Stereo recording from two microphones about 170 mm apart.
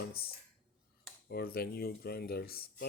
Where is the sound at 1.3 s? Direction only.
65° left (ahead or behind).